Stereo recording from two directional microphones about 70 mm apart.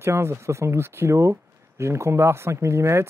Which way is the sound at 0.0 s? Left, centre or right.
Right.